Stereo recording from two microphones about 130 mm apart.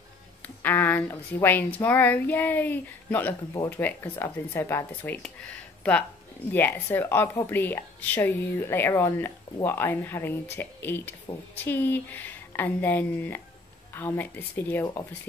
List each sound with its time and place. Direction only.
0.6 s speech: 15° left (ahead or behind)
6.5 s speech: 15° left (ahead or behind)